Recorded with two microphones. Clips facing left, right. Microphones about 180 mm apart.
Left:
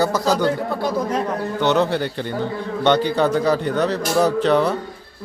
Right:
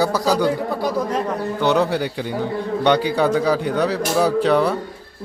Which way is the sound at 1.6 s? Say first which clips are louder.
Even; 5° right (ahead or behind).